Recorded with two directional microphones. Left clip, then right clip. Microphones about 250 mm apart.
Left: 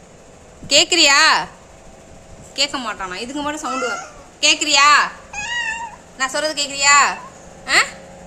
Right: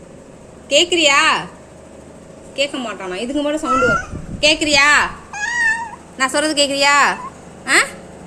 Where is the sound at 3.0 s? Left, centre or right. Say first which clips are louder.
Right 4 dB; centre.